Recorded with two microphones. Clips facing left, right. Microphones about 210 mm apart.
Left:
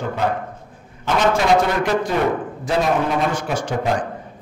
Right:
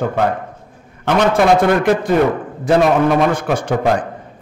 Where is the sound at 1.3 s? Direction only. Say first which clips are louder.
Right 5 dB; 55° right (ahead or behind).